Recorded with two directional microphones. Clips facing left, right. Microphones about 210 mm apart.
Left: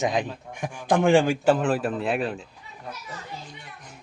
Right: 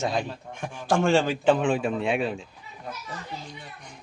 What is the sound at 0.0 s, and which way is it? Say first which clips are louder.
A man's voice: left 2 dB; 15° left (ahead or behind).